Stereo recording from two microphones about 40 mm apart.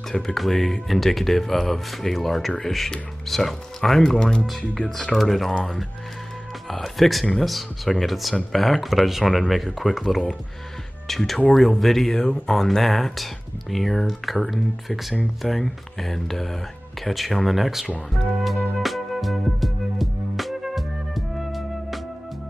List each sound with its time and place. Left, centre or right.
0.3 s speech: centre
5.1 s speech: centre
5.5 s speech: left
6.7 s speech: centre
18.8 s music: centre